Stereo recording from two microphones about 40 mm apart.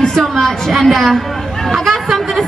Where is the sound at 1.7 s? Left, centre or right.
Centre.